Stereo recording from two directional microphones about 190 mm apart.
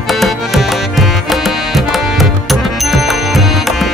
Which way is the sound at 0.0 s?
Centre (ahead or behind).